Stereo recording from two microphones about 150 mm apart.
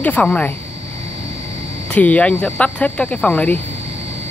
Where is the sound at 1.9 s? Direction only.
10° left (ahead or behind).